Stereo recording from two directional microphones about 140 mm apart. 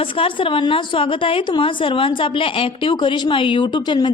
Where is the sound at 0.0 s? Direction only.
40° left (ahead or behind).